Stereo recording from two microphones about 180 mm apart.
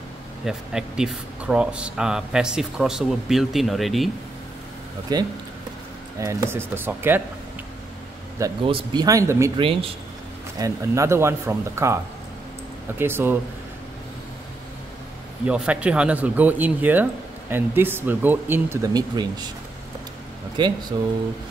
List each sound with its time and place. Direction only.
0.5 s speech: 5° right (ahead or behind)
5.1 s speech: 20° right (ahead or behind)
8.6 s speech: 25° right (ahead or behind)
10.6 s speech: 15° right (ahead or behind)
13.0 s speech: 10° right (ahead or behind)
15.4 s speech: 5° right (ahead or behind); by 19.5 s 25° right (ahead or behind)
20.6 s speech: 25° right (ahead or behind)